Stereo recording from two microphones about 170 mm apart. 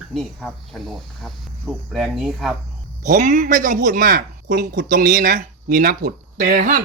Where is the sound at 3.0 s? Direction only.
45° right (ahead or behind).